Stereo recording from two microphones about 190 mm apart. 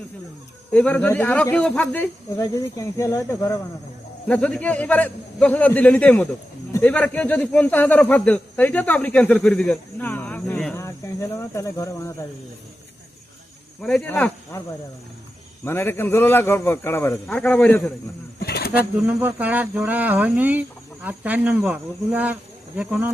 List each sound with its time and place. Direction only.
0.7 s speech: 5° left (ahead or behind)
10.8 s speech: 15° left (ahead or behind)
13.8 s speech: 5° left (ahead or behind)
15.6 s speech: 15° left (ahead or behind)
18.3 s pigeon: 55° left (ahead or behind)
19.0 s speech: 10° right (ahead or behind)